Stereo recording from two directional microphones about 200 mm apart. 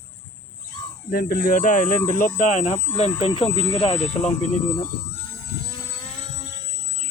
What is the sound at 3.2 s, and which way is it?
Speech, 25° left (ahead or behind).